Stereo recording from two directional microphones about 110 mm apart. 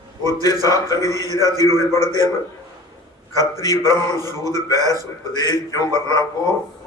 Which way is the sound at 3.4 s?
30° right (ahead or behind).